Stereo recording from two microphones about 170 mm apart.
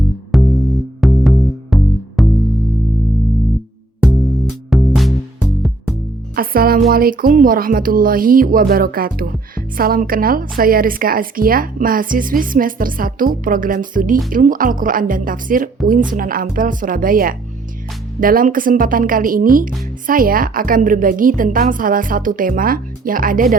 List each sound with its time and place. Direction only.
0.3 s music: centre (ahead or behind)
4.0 s music: centre (ahead or behind)
6.3 s a woman's voice: 60° right (ahead or behind)